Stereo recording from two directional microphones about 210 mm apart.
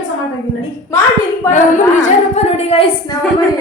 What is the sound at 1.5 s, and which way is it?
Female singing, 35° left (ahead or behind).